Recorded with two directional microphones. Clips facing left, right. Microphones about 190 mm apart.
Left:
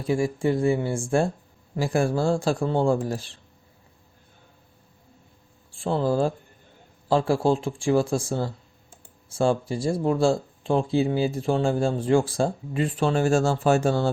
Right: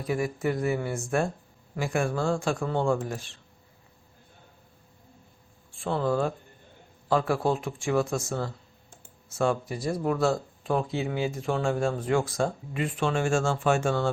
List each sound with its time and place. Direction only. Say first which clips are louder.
0.0 s speech: left 4 dB; 30° left (ahead or behind)
5.7 s speech: left 3 dB; 30° left (ahead or behind)